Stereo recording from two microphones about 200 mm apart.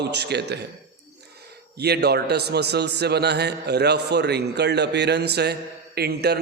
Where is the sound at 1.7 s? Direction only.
55° right (ahead or behind).